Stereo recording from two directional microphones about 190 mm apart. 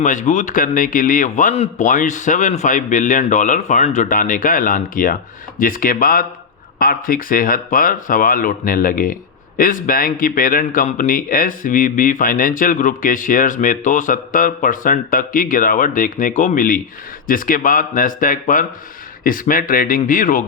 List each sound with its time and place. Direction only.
0.0 s speech: 40° left (ahead or behind)